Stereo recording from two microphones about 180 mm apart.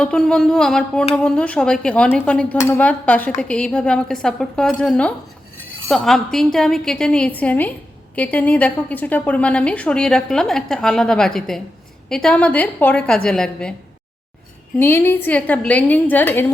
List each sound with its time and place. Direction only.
0.0 s a woman's voice: 5° left (ahead or behind)
14.8 s a woman's voice: 15° left (ahead or behind)